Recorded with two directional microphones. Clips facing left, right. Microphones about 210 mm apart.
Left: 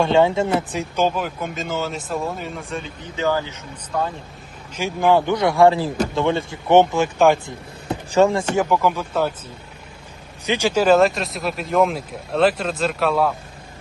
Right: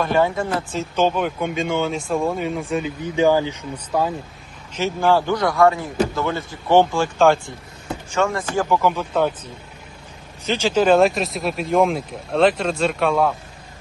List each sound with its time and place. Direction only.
0.0 s speech: 25° left (ahead or behind); by 3.6 s 15° right (ahead or behind)
4.7 s a man's voice: 15° left (ahead or behind)
8.1 s a man's voice: 30° left (ahead or behind)
8.7 s speech: 10° left (ahead or behind)
10.4 s speech: 15° left (ahead or behind)